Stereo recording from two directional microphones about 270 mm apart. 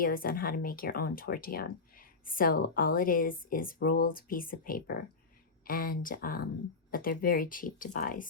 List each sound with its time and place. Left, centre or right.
0.0 s speech: left